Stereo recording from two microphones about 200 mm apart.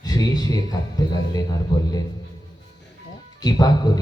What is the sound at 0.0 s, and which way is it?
Speech, 20° left (ahead or behind).